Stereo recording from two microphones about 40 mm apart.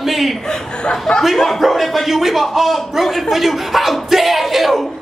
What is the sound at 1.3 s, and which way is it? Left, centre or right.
Speech, centre.